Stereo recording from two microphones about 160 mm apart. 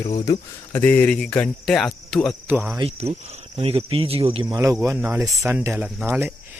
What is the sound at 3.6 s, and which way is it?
Speech, 40° right (ahead or behind).